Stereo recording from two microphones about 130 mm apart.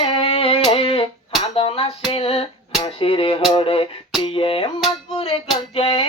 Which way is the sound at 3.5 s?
45° left (ahead or behind).